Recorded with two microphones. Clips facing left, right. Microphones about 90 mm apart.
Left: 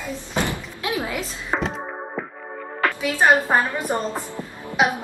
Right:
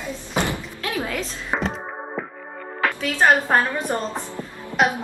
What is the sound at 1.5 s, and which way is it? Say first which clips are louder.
Music: left 1 dB; centre (ahead or behind).